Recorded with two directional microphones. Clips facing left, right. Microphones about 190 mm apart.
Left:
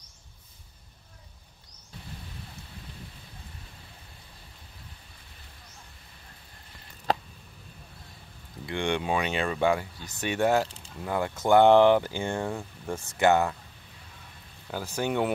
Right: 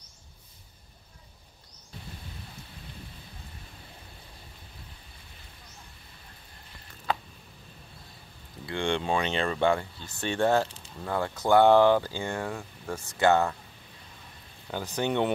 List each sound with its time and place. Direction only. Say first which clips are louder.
8.6 s speech: even; 15° left (ahead or behind)
14.7 s speech: even; 5° left (ahead or behind)